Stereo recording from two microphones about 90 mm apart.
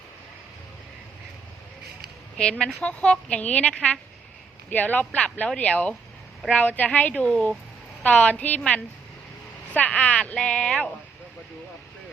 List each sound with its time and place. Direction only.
2.4 s speech: 10° left (ahead or behind)